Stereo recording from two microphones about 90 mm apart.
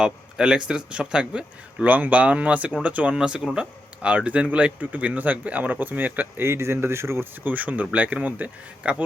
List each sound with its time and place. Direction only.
0.0 s speech: 10° right (ahead or behind)